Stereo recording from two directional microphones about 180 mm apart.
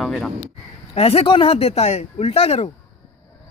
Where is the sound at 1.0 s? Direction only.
35° left (ahead or behind).